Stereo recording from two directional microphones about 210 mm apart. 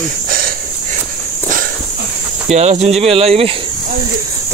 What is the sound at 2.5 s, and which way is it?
Speech, 30° right (ahead or behind).